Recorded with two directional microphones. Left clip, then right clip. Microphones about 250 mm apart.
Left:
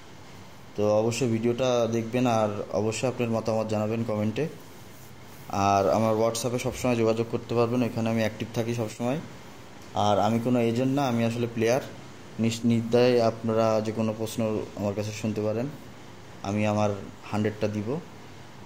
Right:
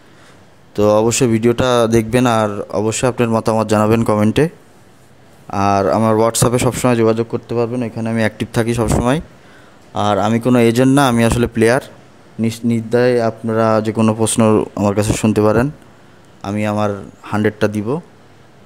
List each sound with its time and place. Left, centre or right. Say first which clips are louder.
0.7 s speech: right 11 dB; right
5.5 s speech: right 8 dB; right